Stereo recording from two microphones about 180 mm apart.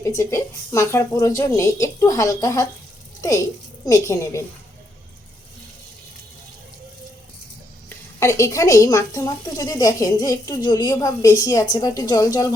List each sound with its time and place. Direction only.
0.0 s a woman's voice: 15° left (ahead or behind)
7.9 s speech: 15° left (ahead or behind)